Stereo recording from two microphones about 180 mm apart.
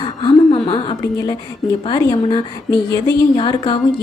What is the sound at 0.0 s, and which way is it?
Gasp, 25° left (ahead or behind).